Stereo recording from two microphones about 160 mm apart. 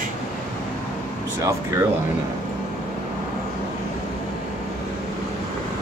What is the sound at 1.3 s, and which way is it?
Speech, 20° right (ahead or behind).